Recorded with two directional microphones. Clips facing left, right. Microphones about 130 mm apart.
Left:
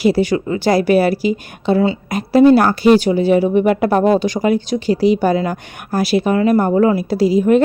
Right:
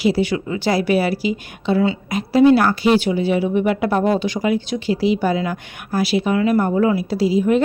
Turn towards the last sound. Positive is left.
turn(degrees=50)  # may be behind; listen again after turning